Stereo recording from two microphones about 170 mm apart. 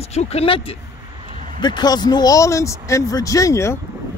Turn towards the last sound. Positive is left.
turn(degrees=15)  # may be behind; listen again after turning